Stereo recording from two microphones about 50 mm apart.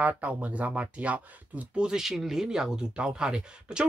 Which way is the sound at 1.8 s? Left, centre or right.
Centre.